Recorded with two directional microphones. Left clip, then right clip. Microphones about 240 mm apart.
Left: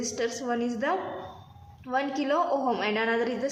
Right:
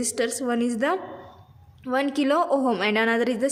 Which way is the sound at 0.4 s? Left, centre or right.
Right.